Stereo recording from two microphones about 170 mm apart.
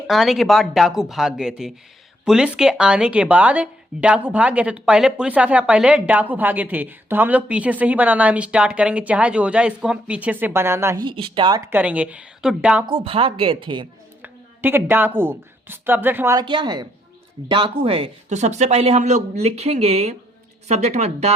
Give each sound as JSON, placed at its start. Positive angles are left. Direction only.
{"t": 0.1, "sound": "speech", "side_deg": 0}
{"t": 11.0, "sound": "speech", "side_deg": -30}
{"t": 11.7, "sound": "speech", "side_deg": -10}
{"t": 12.8, "sound": "speech", "side_deg": -30}
{"t": 14.2, "sound": "a woman's voice", "side_deg": -10}